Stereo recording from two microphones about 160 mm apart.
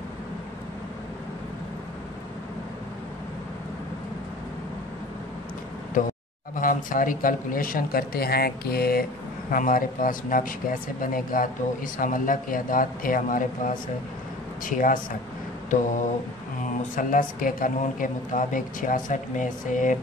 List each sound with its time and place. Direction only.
6.5 s speech: 55° left (ahead or behind); by 9.0 s 70° left (ahead or behind)
9.5 s speech: 60° left (ahead or behind)
15.7 s a sound: 50° left (ahead or behind)
16.9 s speech: 55° left (ahead or behind)